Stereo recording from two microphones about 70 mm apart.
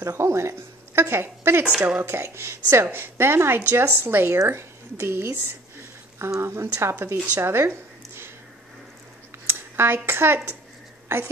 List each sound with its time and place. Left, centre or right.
0.0 s a woman's voice: right
6.4 s a woman's voice: right
7.3 s a sound: right
9.5 s a woman's voice: right